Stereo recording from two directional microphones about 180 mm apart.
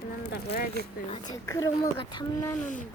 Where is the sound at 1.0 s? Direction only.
35° left (ahead or behind).